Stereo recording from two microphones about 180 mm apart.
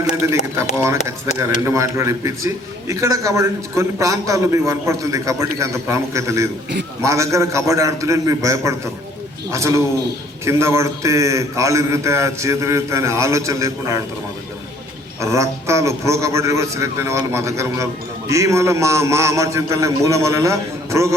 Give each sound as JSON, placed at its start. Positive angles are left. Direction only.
{"t": 0.2, "sound": "a man's voice", "side_deg": -15}
{"t": 15.2, "sound": "a man's voice", "side_deg": -15}